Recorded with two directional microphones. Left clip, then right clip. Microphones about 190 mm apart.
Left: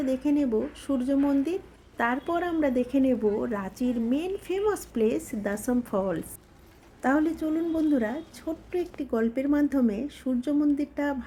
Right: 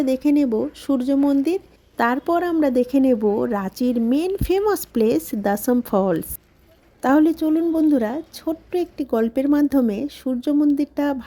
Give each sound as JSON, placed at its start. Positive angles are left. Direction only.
{"t": 0.0, "sound": "a woman's voice", "side_deg": -40}